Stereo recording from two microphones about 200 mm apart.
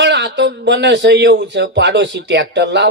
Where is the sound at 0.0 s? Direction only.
60° right (ahead or behind).